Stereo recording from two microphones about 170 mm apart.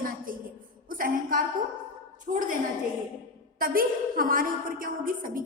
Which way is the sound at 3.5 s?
60° right (ahead or behind).